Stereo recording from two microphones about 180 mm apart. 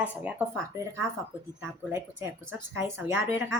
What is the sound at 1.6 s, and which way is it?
Speech, 15° right (ahead or behind).